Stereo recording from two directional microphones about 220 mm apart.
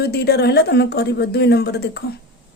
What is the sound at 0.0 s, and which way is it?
Speech, 45° left (ahead or behind).